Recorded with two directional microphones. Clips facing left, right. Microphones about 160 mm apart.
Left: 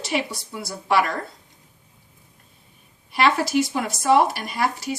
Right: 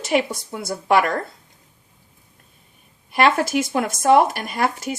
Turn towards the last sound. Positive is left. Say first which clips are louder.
# right 2 dB
turn(degrees=-50)  # may be behind; listen again after turning